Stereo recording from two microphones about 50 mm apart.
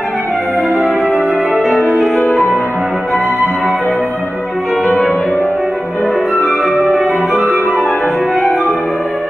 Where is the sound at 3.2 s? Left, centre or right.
Right.